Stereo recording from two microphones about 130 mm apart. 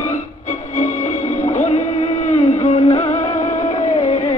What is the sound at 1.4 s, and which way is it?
Music, 65° left (ahead or behind).